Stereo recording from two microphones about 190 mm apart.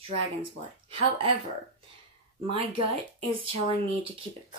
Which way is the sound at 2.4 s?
25° right (ahead or behind).